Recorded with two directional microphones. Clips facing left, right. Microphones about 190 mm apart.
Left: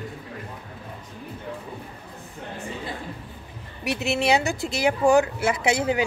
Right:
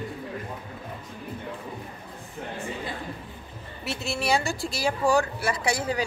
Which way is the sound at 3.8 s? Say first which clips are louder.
Left 6 dB; 15° left (ahead or behind).